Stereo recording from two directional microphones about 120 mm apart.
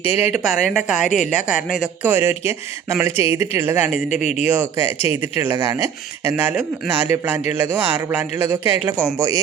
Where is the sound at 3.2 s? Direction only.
50° left (ahead or behind).